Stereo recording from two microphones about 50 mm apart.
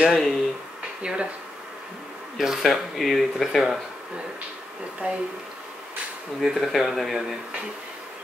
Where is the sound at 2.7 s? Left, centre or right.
Centre.